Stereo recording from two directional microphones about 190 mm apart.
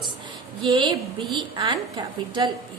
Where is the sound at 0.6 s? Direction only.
25° right (ahead or behind).